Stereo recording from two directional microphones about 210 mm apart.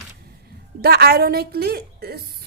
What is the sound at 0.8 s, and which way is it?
A woman's voice, 50° right (ahead or behind).